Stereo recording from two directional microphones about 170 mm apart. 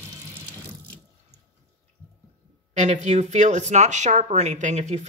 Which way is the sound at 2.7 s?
45° right (ahead or behind).